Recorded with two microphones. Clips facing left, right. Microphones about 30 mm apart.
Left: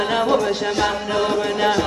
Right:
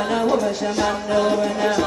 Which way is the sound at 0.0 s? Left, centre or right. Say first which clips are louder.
Left 1 dB; left.